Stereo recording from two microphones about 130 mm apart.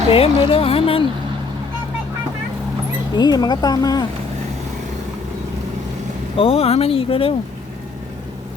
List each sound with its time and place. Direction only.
0.1 s speech: 45° left (ahead or behind)
3.2 s speech: 30° left (ahead or behind)
6.3 s speech: 45° left (ahead or behind)